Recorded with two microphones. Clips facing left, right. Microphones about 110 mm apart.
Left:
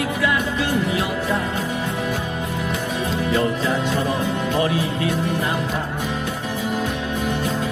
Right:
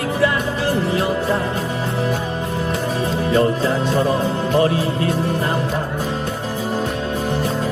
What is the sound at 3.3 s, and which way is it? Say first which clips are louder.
Music: right 4 dB; 35° right (ahead or behind).